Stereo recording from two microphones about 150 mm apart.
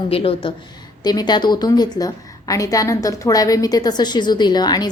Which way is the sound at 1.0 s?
30° left (ahead or behind).